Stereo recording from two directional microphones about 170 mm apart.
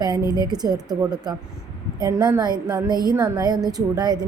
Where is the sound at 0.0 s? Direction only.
25° right (ahead or behind).